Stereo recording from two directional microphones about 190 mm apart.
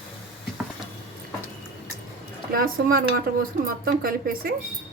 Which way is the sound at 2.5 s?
50° right (ahead or behind).